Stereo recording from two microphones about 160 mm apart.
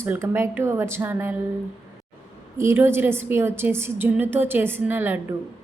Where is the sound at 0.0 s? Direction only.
15° right (ahead or behind).